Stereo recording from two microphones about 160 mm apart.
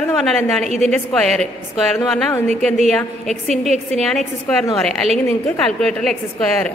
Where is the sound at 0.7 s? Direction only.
45° right (ahead or behind).